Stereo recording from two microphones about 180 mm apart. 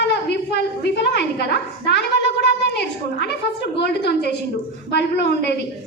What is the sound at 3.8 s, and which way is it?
A woman's voice, 70° left (ahead or behind).